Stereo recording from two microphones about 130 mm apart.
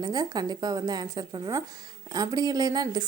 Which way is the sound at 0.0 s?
30° right (ahead or behind).